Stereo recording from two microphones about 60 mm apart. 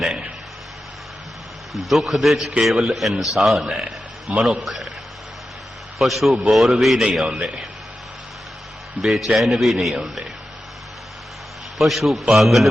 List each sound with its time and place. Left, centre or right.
1.7 s a man's voice: centre
3.7 s a sound: centre
4.6 s a man's voice: centre
6.0 s a man's voice: centre
9.0 s a man's voice: centre
11.8 s a man's voice: centre